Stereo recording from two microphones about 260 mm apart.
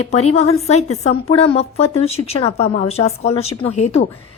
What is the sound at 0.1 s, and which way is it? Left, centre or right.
Speech, left.